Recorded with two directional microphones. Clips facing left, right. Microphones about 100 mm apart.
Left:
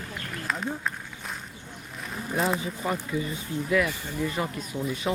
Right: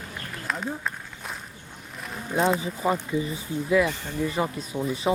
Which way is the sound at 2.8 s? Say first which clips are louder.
Right 5 dB; 15° right (ahead or behind).